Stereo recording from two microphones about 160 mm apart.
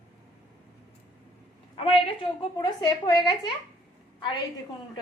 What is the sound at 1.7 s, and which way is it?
A woman's voice, 35° left (ahead or behind).